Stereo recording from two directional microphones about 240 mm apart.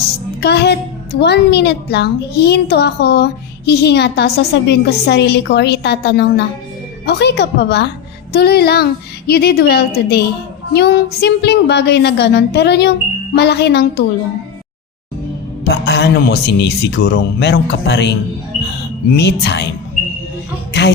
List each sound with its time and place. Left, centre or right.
0.4 s a woman's voice: left
15.6 s a woman's voice: left
19.1 s a woman's voice: left